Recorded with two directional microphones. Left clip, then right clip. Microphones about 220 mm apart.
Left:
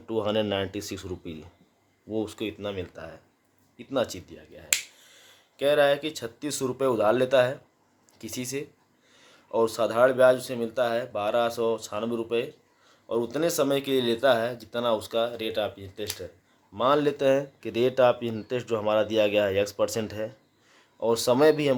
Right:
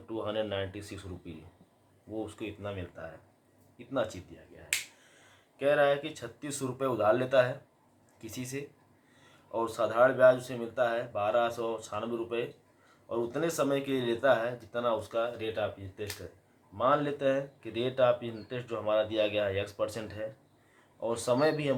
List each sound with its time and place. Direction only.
0.1 s speech: 55° left (ahead or behind)
5.5 s speech: 50° left (ahead or behind)